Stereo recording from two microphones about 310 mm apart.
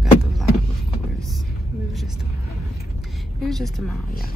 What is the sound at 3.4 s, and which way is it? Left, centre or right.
Speech, centre.